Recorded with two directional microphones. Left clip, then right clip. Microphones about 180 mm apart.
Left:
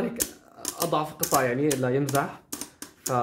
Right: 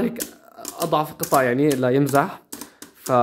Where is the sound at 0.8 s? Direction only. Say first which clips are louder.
Right 5 dB; 45° right (ahead or behind).